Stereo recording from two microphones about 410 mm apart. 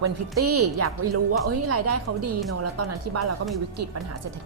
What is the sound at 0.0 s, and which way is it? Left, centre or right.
Speech, right.